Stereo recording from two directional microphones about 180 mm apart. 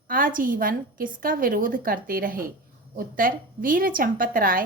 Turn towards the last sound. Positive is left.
turn(degrees=-50)  # may be behind; listen again after turning